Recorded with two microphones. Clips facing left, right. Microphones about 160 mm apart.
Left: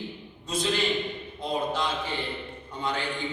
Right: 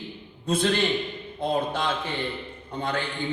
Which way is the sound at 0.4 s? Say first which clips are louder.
Right 4 dB; 55° right (ahead or behind).